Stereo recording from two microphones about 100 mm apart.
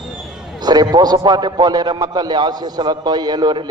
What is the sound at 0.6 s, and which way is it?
A man's voice, 45° right (ahead or behind).